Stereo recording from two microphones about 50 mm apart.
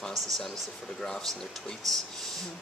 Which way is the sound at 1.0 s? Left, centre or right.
Centre.